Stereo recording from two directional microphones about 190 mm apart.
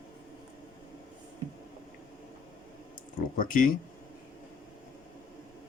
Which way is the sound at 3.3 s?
45° left (ahead or behind).